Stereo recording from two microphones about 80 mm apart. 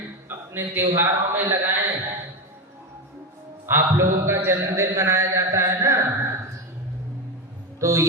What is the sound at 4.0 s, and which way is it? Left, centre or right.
A man's voice, right.